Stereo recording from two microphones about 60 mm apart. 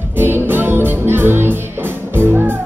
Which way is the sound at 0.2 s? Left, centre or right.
Right.